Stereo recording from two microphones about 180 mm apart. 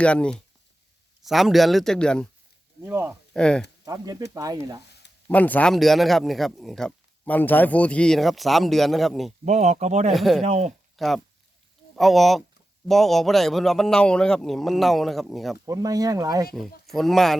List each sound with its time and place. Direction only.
0.0 s speech: 5° left (ahead or behind)
2.8 s speech: 15° right (ahead or behind)
3.3 s speech: 5° left (ahead or behind)
3.8 s speech: 20° right (ahead or behind)
5.3 s speech: 10° left (ahead or behind)
9.4 s speech: 40° right (ahead or behind)
10.1 s speech: centre (ahead or behind)
10.4 s speech: 40° right (ahead or behind)
10.9 s speech: centre (ahead or behind)
15.6 s speech: 20° right (ahead or behind)
16.8 s speech: centre (ahead or behind)